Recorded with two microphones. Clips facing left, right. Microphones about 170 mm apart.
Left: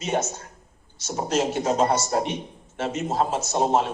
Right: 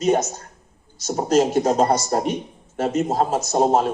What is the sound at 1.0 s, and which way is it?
Speech, 40° right (ahead or behind).